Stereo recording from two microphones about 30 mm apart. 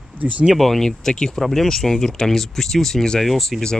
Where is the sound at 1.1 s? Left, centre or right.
Centre.